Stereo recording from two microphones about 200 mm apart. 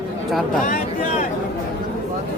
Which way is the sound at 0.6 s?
45° left (ahead or behind).